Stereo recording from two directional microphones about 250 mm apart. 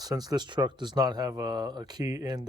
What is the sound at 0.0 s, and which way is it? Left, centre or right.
Speech, centre.